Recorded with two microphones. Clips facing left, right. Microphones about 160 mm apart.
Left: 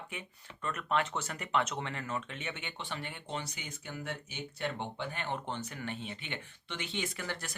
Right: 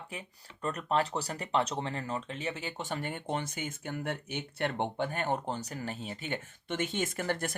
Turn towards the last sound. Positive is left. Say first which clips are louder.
# right 6 dB
turn(degrees=-50)  # may be behind; listen again after turning